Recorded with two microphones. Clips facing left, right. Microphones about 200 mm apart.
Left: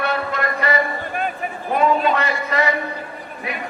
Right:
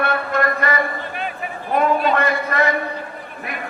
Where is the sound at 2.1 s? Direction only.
50° right (ahead or behind).